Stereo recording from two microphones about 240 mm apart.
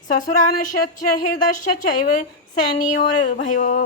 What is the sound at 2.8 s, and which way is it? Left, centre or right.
A woman's voice, left.